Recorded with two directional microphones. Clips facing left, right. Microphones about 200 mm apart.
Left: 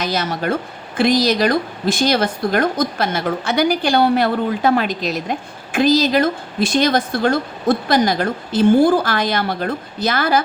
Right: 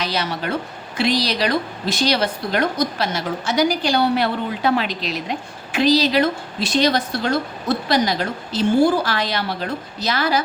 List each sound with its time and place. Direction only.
0.0 s a woman's voice: 45° left (ahead or behind)